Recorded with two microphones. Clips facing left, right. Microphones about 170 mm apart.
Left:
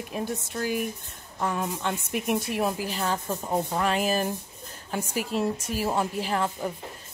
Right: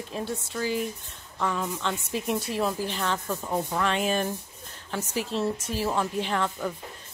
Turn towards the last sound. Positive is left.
turn(degrees=5)  # may be behind; listen again after turning